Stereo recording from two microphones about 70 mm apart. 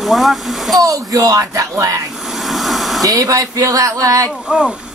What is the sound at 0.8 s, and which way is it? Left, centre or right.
Speech, right.